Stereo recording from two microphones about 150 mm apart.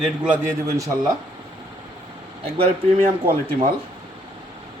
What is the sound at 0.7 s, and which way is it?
Speech, 20° right (ahead or behind).